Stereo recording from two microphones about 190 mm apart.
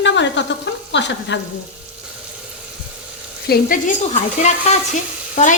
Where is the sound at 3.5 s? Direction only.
45° left (ahead or behind).